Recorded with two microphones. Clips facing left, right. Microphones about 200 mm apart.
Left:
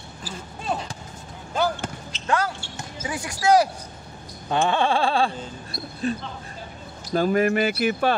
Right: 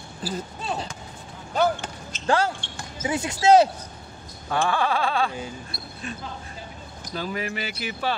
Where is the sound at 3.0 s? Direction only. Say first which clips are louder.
Right 3 dB; 25° right (ahead or behind).